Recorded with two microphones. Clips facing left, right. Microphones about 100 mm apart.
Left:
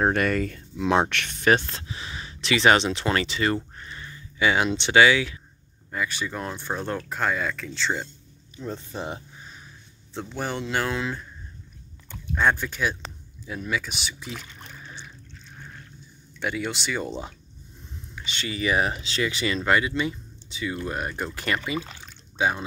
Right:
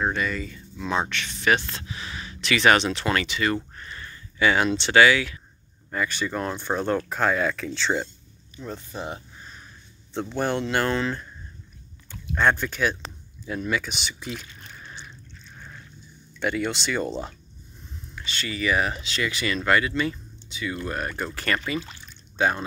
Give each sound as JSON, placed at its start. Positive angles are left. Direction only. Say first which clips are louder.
{"t": 0.0, "sound": "speech", "louder": "left 4 dB", "side_deg": 55}
{"t": 1.4, "sound": "speech", "louder": "left 2 dB", "side_deg": 35}
{"t": 3.7, "sound": "a sound", "louder": "even", "side_deg": 20}
{"t": 5.9, "sound": "speech", "louder": "right 2 dB", "side_deg": 5}
{"t": 8.5, "sound": "speech", "louder": "left 1 dB", "side_deg": 25}
{"t": 10.1, "sound": "speech", "louder": "right 5 dB", "side_deg": 5}
{"t": 12.4, "sound": "speech", "louder": "right 1 dB", "side_deg": 5}
{"t": 16.3, "sound": "speech", "louder": "right 3 dB", "side_deg": 5}
{"t": 18.1, "sound": "speech", "louder": "even", "side_deg": 20}